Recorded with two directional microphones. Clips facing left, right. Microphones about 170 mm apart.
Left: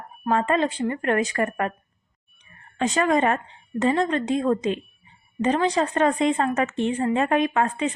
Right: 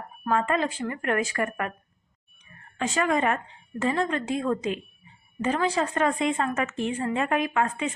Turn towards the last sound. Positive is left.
turn(degrees=35)  # may be behind; listen again after turning